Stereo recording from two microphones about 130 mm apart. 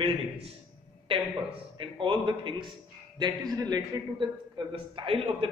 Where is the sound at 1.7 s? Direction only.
40° right (ahead or behind).